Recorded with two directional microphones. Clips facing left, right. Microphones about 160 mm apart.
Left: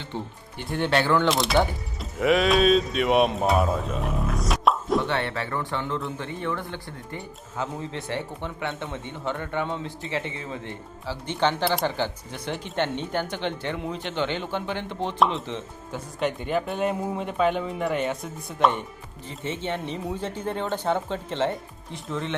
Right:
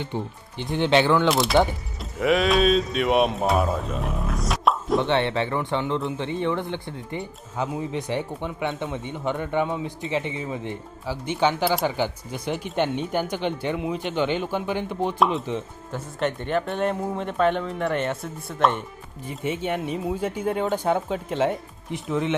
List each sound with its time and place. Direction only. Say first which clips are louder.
0.1 s speech: right 3 dB; 15° right (ahead or behind)
1.3 s speech: right 2 dB; centre (ahead or behind)
4.9 s speech: right 4 dB; 20° right (ahead or behind)
15.9 s speech: right 1 dB; 5° left (ahead or behind)
19.3 s speech: right 3 dB; 10° right (ahead or behind)